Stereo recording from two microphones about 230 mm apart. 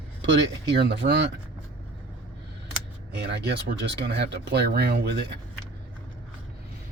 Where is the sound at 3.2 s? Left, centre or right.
Right.